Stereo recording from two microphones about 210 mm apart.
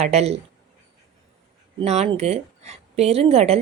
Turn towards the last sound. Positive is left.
turn(degrees=-30)  # may be behind; listen again after turning